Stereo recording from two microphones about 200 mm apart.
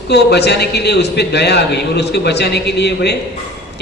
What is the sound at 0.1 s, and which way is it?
A man's voice, 55° left (ahead or behind).